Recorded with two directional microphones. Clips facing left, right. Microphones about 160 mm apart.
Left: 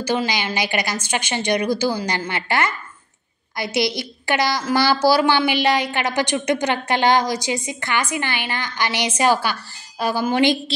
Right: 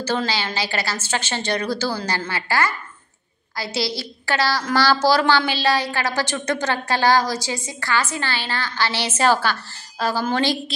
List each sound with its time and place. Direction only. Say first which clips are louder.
0.0 s a woman's voice: left 1 dB; 15° left (ahead or behind)